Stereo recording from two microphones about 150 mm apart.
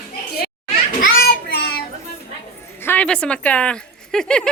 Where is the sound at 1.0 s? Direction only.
70° left (ahead or behind); by 1.8 s 90° left.